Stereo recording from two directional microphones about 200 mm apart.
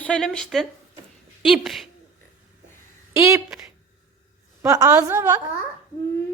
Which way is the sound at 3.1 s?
15° right (ahead or behind).